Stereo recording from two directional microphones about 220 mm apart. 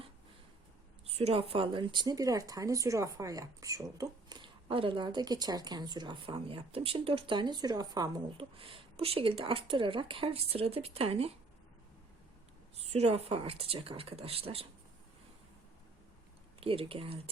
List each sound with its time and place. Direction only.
1.0 s speech: 25° right (ahead or behind)
12.7 s speech: 30° right (ahead or behind)
16.6 s speech: 25° right (ahead or behind)